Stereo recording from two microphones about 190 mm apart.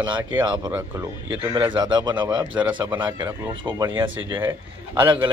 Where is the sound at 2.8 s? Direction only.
10° right (ahead or behind).